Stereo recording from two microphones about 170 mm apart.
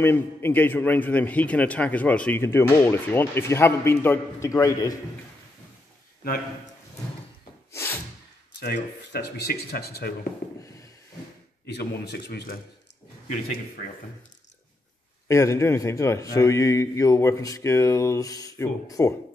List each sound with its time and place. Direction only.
0.0 s a man's voice: 10° left (ahead or behind)
6.2 s a man's voice: 60° left (ahead or behind)
7.7 s a sound: 15° left (ahead or behind)
8.5 s speech: 80° left
11.6 s speech: 75° left (ahead or behind)
15.2 s a man's voice: 15° left (ahead or behind)